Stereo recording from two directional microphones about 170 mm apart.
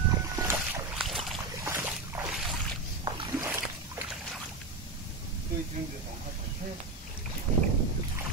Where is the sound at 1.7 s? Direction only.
15° right (ahead or behind).